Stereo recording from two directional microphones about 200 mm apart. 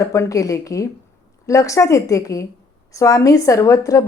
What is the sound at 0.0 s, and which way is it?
A woman's voice, 15° left (ahead or behind).